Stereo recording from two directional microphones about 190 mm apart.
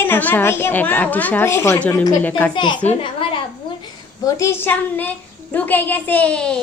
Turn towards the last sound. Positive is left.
turn(degrees=5)  # may be behind; listen again after turning